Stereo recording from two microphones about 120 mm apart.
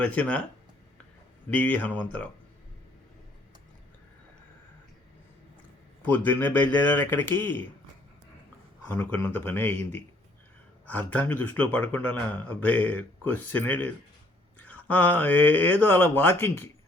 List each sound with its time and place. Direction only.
0.0 s speech: 10° left (ahead or behind)
1.5 s speech: 10° left (ahead or behind)
6.0 s speech: 15° left (ahead or behind)
8.9 s speech: 15° left (ahead or behind)